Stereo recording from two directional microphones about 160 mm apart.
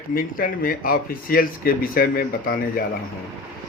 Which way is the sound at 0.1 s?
65° left (ahead or behind).